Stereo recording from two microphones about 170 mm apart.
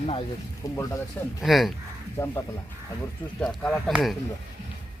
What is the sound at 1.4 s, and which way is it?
Speech, centre (ahead or behind).